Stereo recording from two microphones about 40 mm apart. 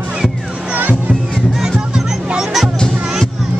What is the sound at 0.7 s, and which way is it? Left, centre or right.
Music, right.